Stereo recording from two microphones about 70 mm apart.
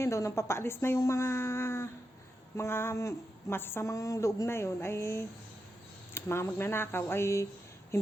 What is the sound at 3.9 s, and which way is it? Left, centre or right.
A woman's voice, left.